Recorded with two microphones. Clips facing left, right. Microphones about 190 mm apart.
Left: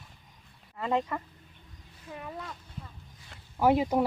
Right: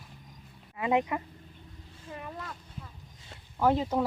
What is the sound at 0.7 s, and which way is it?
Speech, 15° right (ahead or behind).